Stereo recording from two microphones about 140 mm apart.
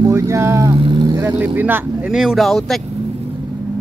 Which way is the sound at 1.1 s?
15° right (ahead or behind).